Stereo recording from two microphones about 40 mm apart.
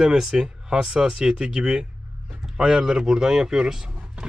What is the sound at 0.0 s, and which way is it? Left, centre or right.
Speech, centre.